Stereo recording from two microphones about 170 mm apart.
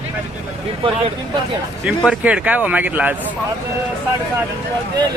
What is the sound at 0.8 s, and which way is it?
Speech, 30° right (ahead or behind).